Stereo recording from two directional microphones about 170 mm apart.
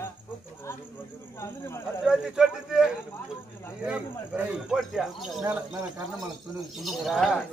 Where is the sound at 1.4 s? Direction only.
15° left (ahead or behind).